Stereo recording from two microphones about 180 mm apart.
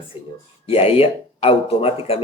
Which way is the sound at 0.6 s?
35° left (ahead or behind).